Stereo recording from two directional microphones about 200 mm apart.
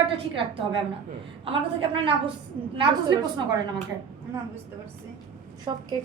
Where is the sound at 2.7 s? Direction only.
25° right (ahead or behind).